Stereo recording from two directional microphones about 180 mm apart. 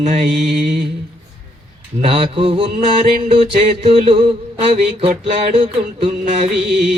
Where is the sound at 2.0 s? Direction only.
30° right (ahead or behind).